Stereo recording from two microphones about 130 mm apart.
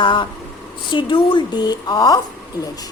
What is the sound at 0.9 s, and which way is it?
A woman's voice, 40° left (ahead or behind).